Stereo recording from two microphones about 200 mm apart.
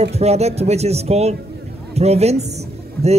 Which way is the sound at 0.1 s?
30° right (ahead or behind).